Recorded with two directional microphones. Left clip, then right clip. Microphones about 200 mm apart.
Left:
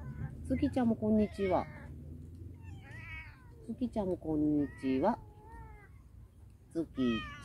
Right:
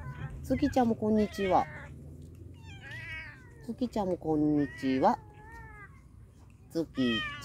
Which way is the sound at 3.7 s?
55° right (ahead or behind).